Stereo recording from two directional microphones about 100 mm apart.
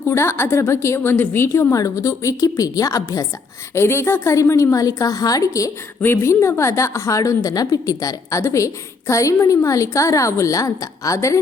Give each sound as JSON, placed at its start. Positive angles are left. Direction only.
{"t": 0.1, "sound": "a woman's voice", "side_deg": 25}
{"t": 1.7, "sound": "a woman's voice", "side_deg": 35}
{"t": 3.8, "sound": "a woman's voice", "side_deg": 25}
{"t": 6.0, "sound": "a woman's voice", "side_deg": 25}